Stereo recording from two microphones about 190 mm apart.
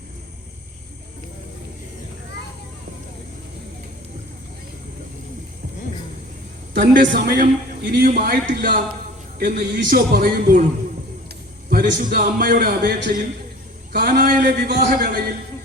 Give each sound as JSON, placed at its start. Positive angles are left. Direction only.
{"t": 6.9, "sound": "a man's voice", "side_deg": -45}
{"t": 11.7, "sound": "a man's voice", "side_deg": -50}